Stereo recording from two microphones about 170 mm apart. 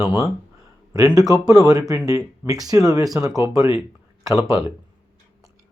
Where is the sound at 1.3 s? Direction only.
20° right (ahead or behind).